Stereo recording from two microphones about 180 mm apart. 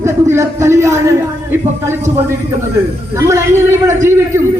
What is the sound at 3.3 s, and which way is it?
A man's voice, 15° right (ahead or behind).